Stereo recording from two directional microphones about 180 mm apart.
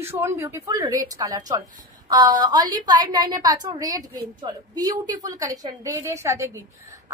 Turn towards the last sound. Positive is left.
turn(degrees=-15)  # may be behind; listen again after turning